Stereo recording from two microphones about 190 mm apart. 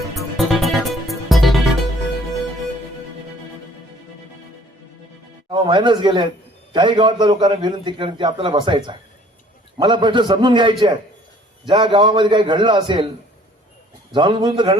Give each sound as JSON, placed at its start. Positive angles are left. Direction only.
{"t": 0.2, "sound": "music", "side_deg": 0}
{"t": 5.5, "sound": "a man's voice", "side_deg": -25}
{"t": 14.1, "sound": "a man's voice", "side_deg": -25}